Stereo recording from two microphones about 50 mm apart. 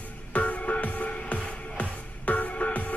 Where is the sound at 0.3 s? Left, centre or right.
Left.